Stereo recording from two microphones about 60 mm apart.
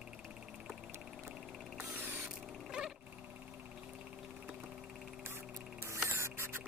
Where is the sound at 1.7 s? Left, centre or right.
Right.